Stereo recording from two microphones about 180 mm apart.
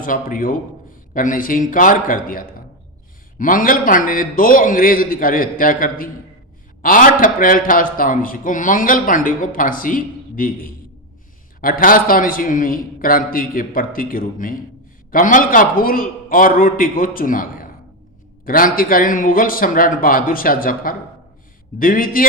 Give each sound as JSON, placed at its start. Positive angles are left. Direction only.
{"t": 0.0, "sound": "a man's voice", "side_deg": 50}